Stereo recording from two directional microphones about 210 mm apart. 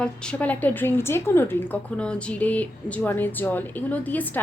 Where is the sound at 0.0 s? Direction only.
5° left (ahead or behind).